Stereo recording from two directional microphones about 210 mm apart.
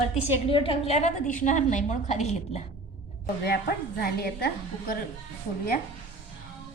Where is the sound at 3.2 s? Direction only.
50° left (ahead or behind).